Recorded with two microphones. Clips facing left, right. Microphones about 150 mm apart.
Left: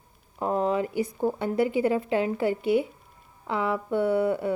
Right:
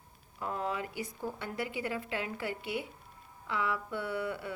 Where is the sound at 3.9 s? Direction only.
45° left (ahead or behind).